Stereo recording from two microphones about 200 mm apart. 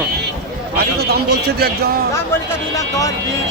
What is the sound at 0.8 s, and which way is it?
A man's voice, 50° right (ahead or behind).